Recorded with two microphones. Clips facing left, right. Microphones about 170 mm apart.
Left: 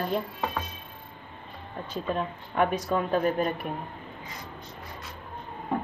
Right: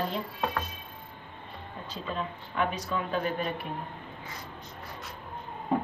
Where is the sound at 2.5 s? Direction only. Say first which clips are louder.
Left 5 dB; 45° left (ahead or behind).